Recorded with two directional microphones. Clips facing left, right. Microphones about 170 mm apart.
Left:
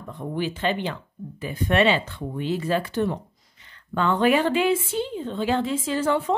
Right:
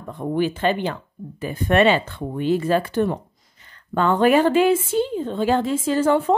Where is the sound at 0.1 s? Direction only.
50° right (ahead or behind).